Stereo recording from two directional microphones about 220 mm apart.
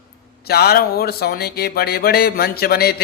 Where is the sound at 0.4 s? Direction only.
45° left (ahead or behind).